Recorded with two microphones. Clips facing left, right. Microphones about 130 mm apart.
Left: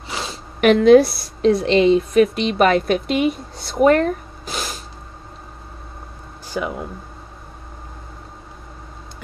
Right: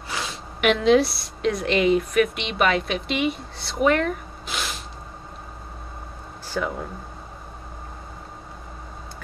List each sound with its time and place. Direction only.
0.1 s a sound: 30° left (ahead or behind)
1.4 s a woman's voice: 30° left (ahead or behind)
6.5 s speech: 15° left (ahead or behind)